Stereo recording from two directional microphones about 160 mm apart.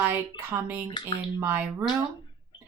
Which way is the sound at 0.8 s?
30° left (ahead or behind).